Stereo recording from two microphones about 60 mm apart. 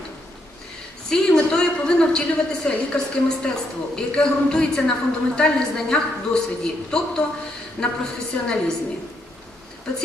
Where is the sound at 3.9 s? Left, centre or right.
Centre.